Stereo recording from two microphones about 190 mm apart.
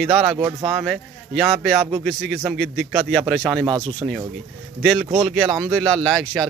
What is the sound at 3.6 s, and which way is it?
Speech, 20° right (ahead or behind).